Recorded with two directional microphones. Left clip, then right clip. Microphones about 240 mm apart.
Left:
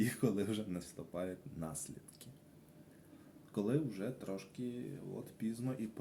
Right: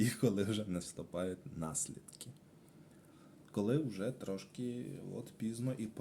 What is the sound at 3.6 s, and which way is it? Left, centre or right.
Speech, right.